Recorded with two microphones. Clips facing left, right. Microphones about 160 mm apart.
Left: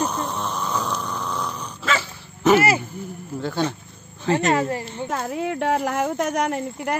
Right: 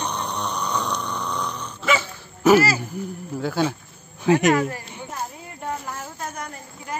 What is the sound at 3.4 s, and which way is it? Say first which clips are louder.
Speech: right 1 dB; 5° right (ahead or behind).